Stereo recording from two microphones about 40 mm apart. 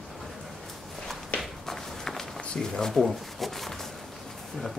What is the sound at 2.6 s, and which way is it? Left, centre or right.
Speech, centre.